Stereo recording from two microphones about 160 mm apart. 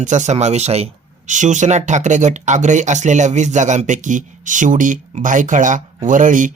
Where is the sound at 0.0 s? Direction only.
50° right (ahead or behind).